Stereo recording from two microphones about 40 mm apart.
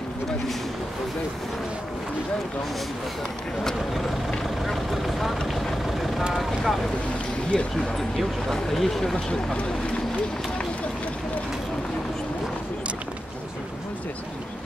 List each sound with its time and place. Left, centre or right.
4.3 s vehicle: centre
7.5 s speech: centre